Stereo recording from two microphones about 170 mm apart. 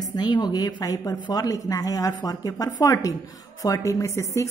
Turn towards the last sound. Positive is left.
turn(degrees=20)  # may be behind; listen again after turning